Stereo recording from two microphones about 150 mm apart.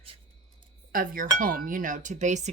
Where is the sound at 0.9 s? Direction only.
70° right (ahead or behind); by 2.5 s 55° right (ahead or behind).